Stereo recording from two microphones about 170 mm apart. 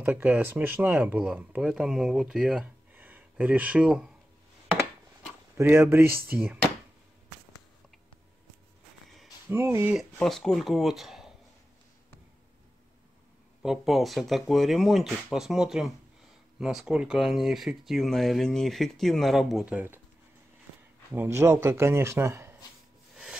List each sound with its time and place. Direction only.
0.0 s speech: 10° right (ahead or behind)
5.6 s speech: 15° right (ahead or behind)
9.5 s speech: 15° right (ahead or behind)
9.9 s speech: centre (ahead or behind)
13.6 s speech: centre (ahead or behind)
21.1 s speech: 15° right (ahead or behind)